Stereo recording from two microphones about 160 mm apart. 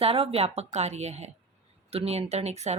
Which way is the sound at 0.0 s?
40° right (ahead or behind).